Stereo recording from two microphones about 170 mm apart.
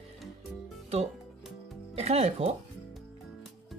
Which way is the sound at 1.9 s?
40° right (ahead or behind).